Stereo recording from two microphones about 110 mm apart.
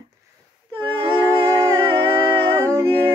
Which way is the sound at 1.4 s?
25° right (ahead or behind).